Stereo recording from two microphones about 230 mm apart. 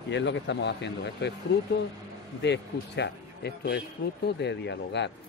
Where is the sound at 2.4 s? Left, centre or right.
Left.